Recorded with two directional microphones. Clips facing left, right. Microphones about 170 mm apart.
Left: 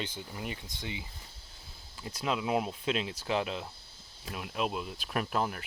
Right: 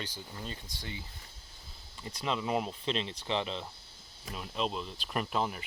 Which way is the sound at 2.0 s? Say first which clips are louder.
Left 1 dB; 5° left (ahead or behind).